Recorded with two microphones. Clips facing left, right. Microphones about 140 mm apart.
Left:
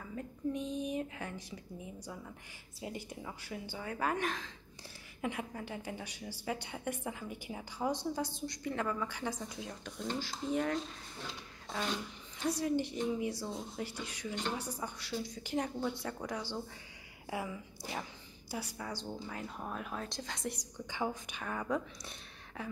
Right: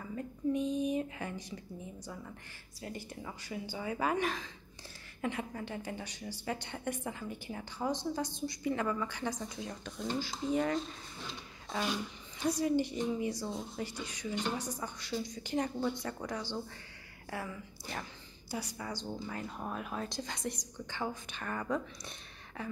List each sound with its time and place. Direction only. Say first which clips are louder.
0.0 s speech: right 3 dB; centre (ahead or behind)
2.0 s speech: right 1 dB; 10° left (ahead or behind)
3.2 s speech: right 2 dB; centre (ahead or behind)